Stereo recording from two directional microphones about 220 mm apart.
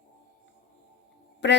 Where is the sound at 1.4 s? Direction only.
55° left (ahead or behind).